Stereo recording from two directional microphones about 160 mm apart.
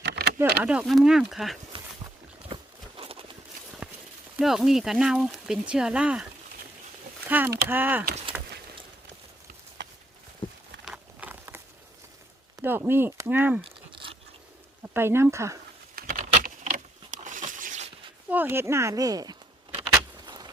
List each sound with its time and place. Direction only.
0.0 s a sound: 90° right
0.3 s speech: 10° right (ahead or behind)
1.7 s dog: 35° right (ahead or behind)
3.0 s a sound: 35° right (ahead or behind)
3.8 s clip-clop: 5° right (ahead or behind)
4.4 s speech: 5° right (ahead or behind)
7.3 s speech: 10° right (ahead or behind)
10.8 s patter: 5° right (ahead or behind)
12.6 s speech: 15° right (ahead or behind)
13.7 s a sound: 35° right (ahead or behind)
14.9 s speech: 15° right (ahead or behind)
16.0 s a sound: 60° right (ahead or behind)
18.3 s speech: 10° right (ahead or behind)
19.9 s vehicle: 25° right (ahead or behind)